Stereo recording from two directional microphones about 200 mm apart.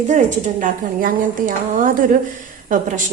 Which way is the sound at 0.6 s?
40° right (ahead or behind).